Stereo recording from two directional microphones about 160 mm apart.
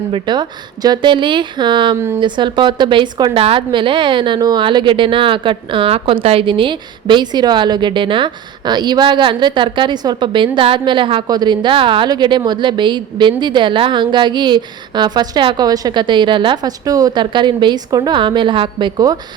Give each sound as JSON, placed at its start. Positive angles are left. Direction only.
{"t": 0.1, "sound": "a woman's voice", "side_deg": -30}